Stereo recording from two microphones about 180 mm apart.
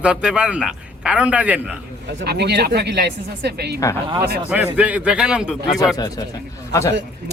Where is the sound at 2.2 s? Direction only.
65° right (ahead or behind).